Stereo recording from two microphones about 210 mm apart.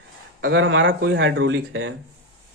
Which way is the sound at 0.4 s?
65° right (ahead or behind).